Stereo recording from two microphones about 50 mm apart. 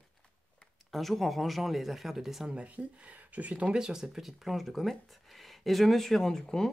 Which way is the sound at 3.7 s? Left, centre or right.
Centre.